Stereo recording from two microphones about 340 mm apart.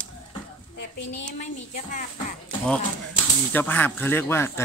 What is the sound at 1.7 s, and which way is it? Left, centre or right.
Speech, left.